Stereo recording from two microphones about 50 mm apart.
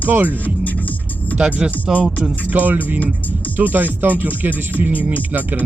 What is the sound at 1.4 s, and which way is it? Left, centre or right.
Speech, right.